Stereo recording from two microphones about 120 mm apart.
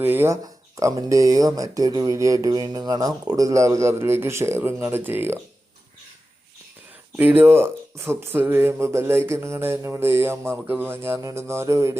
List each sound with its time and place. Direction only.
0.0 s speech: 20° right (ahead or behind)
7.2 s speech: 15° right (ahead or behind)